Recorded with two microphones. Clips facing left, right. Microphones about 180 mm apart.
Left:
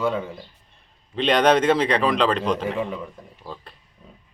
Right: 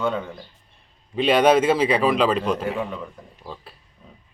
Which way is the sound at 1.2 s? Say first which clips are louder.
Right 1 dB; 5° right (ahead or behind).